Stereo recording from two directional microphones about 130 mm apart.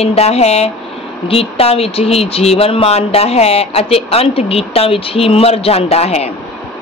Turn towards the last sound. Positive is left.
turn(degrees=50)  # may be behind; listen again after turning